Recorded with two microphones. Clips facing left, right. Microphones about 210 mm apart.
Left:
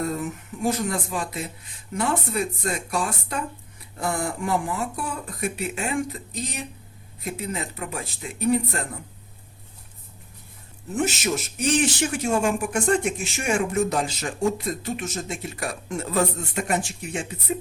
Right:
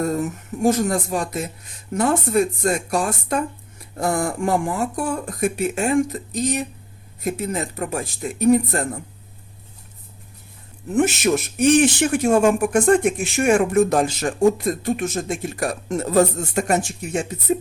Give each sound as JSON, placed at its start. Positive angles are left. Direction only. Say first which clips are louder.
{"t": 0.0, "sound": "speech", "louder": "right 5 dB", "side_deg": -45}
{"t": 10.9, "sound": "speech", "louder": "right 7 dB", "side_deg": -60}